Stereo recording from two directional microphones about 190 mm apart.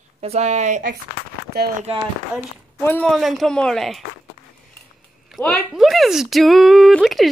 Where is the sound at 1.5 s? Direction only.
60° right (ahead or behind).